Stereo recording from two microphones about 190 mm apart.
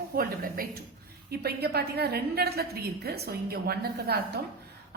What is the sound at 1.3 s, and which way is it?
A woman's voice, 55° right (ahead or behind).